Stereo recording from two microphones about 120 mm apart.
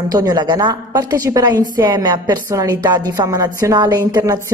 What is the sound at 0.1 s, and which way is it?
A woman's voice, 35° right (ahead or behind).